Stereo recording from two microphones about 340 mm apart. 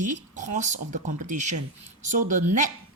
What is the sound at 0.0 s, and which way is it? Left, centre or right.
Speech, right.